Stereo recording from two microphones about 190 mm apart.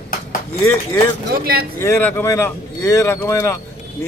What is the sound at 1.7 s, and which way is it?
A man's voice, 15° left (ahead or behind).